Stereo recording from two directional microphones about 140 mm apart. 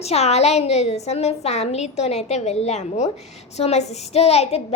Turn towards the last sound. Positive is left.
turn(degrees=45)  # may be behind; listen again after turning